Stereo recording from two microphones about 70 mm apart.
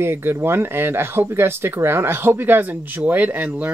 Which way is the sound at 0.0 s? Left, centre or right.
Right.